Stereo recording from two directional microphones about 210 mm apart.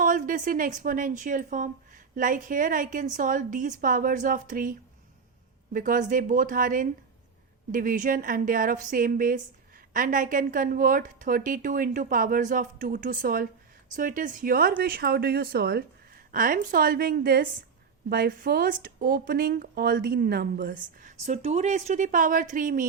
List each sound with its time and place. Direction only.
0.0 s a woman's voice: 40° right (ahead or behind)
5.7 s a woman's voice: 40° right (ahead or behind)